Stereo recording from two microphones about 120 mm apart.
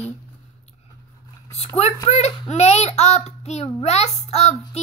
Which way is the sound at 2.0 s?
65° left (ahead or behind).